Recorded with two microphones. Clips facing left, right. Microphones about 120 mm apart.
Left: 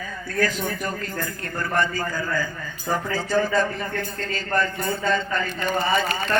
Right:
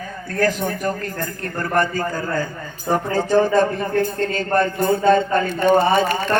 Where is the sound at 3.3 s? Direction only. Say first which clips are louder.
Right 6 dB; 50° right (ahead or behind).